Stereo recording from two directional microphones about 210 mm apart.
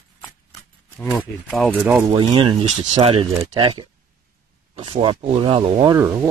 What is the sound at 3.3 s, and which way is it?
Speech, 15° right (ahead or behind).